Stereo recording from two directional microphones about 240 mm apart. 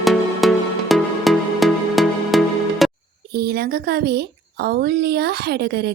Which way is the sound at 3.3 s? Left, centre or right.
Right.